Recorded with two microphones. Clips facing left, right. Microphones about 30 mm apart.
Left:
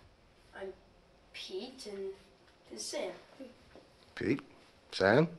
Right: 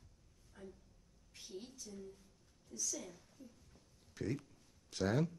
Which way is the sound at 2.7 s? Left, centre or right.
Left.